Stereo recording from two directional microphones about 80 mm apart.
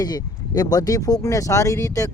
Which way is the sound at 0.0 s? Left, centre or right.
Left.